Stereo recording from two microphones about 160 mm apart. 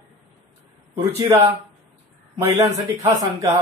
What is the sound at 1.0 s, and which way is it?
Speech, 20° right (ahead or behind).